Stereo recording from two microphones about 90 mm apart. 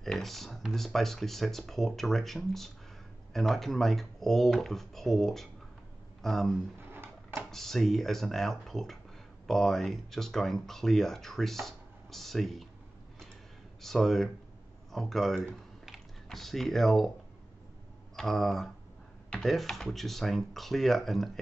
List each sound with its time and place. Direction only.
0.0 s speech: centre (ahead or behind)
6.9 s a sound: 25° right (ahead or behind)
7.5 s speech: 5° left (ahead or behind)
13.7 s speech: 5° left (ahead or behind)
15.8 s typing: centre (ahead or behind)
18.1 s speech: 5° left (ahead or behind)